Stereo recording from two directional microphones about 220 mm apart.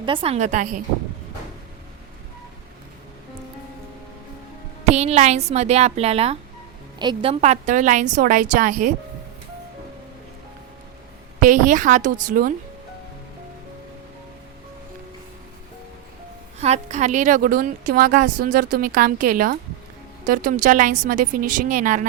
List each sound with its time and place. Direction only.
0.0 s a woman's voice: 25° right (ahead or behind)
4.9 s a woman's voice: 30° right (ahead or behind)
11.3 s a woman's voice: 35° right (ahead or behind)
16.6 s a woman's voice: 30° right (ahead or behind)